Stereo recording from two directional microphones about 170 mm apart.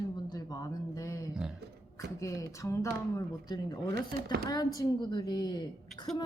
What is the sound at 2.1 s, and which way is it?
A woman's voice, 20° left (ahead or behind).